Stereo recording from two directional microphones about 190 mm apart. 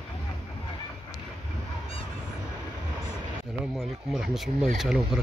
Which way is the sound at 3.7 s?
Centre (ahead or behind).